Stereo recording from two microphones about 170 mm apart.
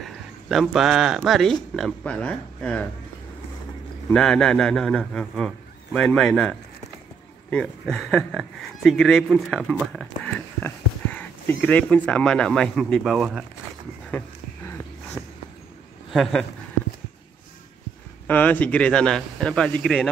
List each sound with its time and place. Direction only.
0.0 s speech: centre (ahead or behind)
4.1 s speech: 5° left (ahead or behind)
7.5 s speech: 5° left (ahead or behind)
15.2 s a sound: 15° left (ahead or behind)
16.1 s speech: centre (ahead or behind)
18.2 s speech: 10° left (ahead or behind)